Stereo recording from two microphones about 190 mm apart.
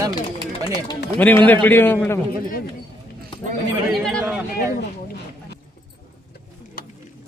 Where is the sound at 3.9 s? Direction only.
Centre (ahead or behind).